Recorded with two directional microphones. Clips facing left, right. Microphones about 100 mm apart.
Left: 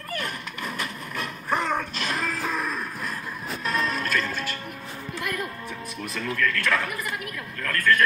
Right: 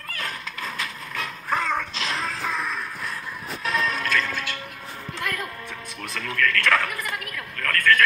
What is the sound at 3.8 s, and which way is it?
Music, 35° left (ahead or behind).